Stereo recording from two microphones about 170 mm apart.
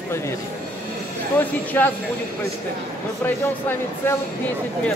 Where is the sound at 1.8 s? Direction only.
15° left (ahead or behind).